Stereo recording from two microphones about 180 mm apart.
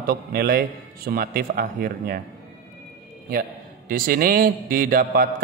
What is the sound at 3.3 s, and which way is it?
A man's voice, 55° right (ahead or behind).